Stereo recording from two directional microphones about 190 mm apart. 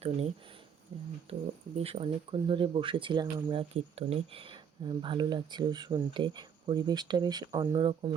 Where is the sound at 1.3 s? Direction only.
30° right (ahead or behind).